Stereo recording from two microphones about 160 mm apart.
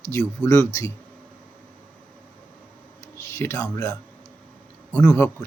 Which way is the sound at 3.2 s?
15° left (ahead or behind).